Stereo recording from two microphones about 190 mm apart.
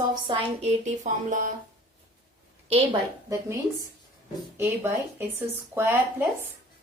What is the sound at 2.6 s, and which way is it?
Speech, 30° right (ahead or behind).